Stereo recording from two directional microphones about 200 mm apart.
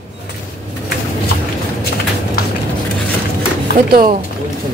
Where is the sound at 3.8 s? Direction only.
45° right (ahead or behind).